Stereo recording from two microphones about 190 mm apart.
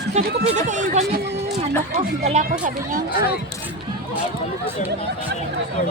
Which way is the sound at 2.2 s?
40° right (ahead or behind).